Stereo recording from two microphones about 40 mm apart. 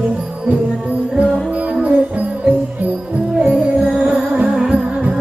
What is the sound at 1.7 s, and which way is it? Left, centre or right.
Music, right.